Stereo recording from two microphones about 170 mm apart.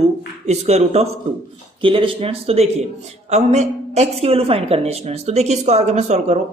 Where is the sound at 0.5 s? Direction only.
40° right (ahead or behind).